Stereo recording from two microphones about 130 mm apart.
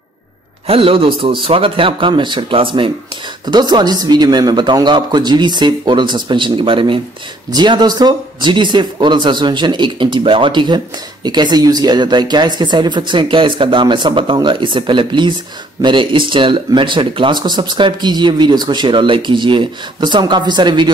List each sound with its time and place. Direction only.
0.7 s speech: 45° right (ahead or behind)